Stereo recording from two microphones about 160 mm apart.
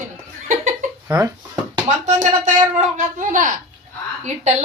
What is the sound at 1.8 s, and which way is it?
A woman's voice, 50° right (ahead or behind).